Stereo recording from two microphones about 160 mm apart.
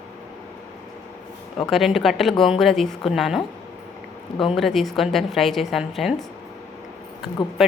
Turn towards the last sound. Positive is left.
turn(degrees=0)  # may be behind; listen again after turning